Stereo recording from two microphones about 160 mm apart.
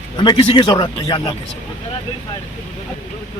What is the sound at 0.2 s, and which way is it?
A man's voice, 30° left (ahead or behind).